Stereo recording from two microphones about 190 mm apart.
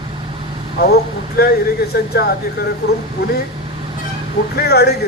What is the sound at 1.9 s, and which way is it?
Speech, 55° left (ahead or behind).